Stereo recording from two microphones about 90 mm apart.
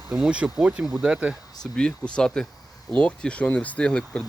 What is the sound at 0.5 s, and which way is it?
Speech, 5° right (ahead or behind).